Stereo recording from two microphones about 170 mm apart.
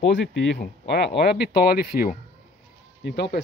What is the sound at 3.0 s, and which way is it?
Speech, 80° left.